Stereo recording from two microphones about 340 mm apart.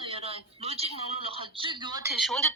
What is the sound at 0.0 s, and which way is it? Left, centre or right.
Speech, centre.